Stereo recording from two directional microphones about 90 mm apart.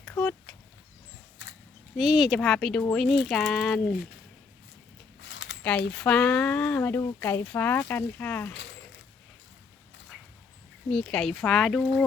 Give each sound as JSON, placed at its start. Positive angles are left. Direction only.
{"t": 0.2, "sound": "cat", "side_deg": 10}
{"t": 2.0, "sound": "speech", "side_deg": -5}
{"t": 2.4, "sound": "speech", "side_deg": 5}
{"t": 5.6, "sound": "speech", "side_deg": 10}
{"t": 10.8, "sound": "speech", "side_deg": 5}